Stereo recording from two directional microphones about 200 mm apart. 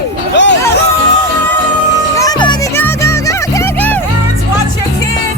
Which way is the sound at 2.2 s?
20° left (ahead or behind).